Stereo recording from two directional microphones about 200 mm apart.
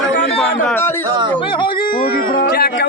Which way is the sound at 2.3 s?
50° left (ahead or behind).